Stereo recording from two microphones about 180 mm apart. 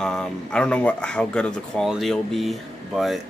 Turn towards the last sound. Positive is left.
turn(degrees=0)  # may be behind; listen again after turning